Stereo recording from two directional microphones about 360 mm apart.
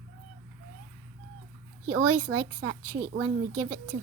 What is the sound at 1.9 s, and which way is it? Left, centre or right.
Speech, right.